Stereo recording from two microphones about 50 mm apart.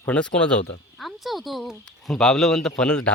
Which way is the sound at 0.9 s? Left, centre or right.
Centre.